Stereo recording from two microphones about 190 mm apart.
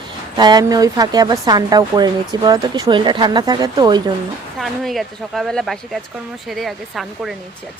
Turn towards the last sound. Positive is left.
turn(degrees=0)  # may be behind; listen again after turning